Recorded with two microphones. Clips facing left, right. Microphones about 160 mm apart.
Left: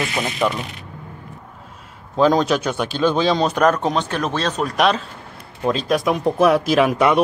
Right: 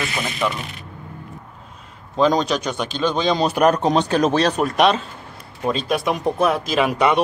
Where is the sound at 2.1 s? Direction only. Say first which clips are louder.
Left 2 dB; 5° left (ahead or behind).